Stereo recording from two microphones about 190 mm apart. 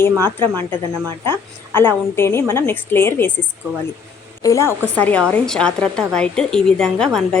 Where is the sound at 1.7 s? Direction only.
10° left (ahead or behind).